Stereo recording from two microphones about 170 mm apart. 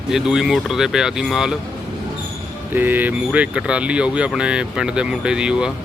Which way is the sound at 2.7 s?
10° right (ahead or behind).